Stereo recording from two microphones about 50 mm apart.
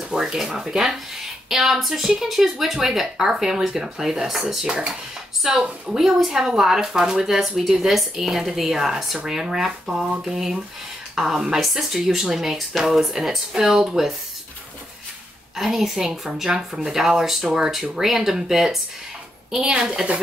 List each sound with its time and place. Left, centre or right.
0.1 s speech: centre
4.6 s speech: centre
5.4 s speech: centre
15.5 s speech: centre